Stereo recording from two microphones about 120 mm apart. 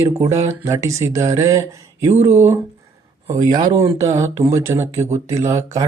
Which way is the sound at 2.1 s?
65° right (ahead or behind).